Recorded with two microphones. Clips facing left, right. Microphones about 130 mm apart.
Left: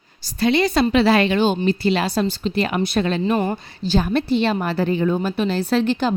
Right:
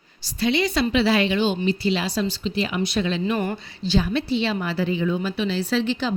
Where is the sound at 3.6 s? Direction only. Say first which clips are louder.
Left 2 dB; 45° left (ahead or behind).